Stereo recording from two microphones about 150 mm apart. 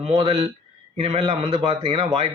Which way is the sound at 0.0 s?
40° right (ahead or behind).